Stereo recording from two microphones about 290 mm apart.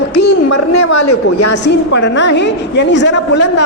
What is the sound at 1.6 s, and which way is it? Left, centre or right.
A woman's voice, left.